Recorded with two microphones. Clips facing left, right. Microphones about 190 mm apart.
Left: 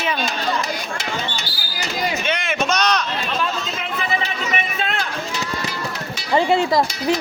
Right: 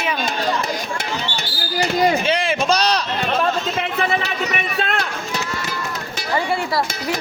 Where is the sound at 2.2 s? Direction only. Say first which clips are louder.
Right 3 dB; 30° right (ahead or behind).